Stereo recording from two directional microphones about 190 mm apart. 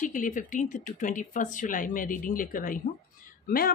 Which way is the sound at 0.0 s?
45° left (ahead or behind).